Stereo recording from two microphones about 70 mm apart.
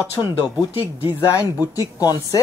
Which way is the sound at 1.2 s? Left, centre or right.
Left.